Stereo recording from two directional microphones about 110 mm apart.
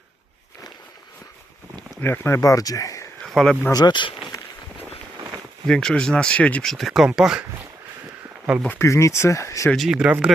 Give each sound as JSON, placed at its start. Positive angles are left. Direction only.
{"t": 2.0, "sound": "speech", "side_deg": 20}
{"t": 3.2, "sound": "speech", "side_deg": 0}
{"t": 3.7, "sound": "speech", "side_deg": 40}
{"t": 5.6, "sound": "speech", "side_deg": 5}
{"t": 8.8, "sound": "speech", "side_deg": 25}
{"t": 9.7, "sound": "speech", "side_deg": -5}